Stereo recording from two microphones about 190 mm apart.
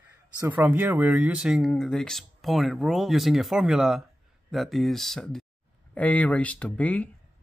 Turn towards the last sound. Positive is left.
turn(degrees=5)  # may be behind; listen again after turning